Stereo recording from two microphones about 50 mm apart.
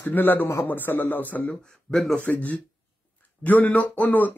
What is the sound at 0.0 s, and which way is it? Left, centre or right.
Speech, left.